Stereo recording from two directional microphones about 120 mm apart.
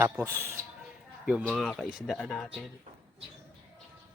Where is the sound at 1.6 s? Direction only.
5° left (ahead or behind).